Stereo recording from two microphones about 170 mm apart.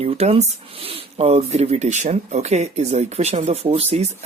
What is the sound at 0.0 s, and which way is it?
Speech, 40° right (ahead or behind).